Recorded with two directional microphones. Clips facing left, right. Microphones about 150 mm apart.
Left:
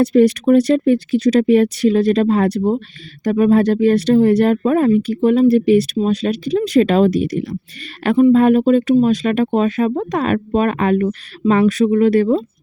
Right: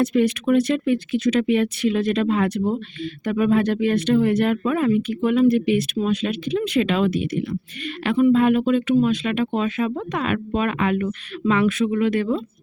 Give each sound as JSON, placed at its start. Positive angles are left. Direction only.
{"t": 0.0, "sound": "speech", "side_deg": 35}